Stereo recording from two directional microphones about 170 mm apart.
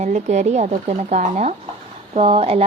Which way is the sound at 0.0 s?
45° right (ahead or behind).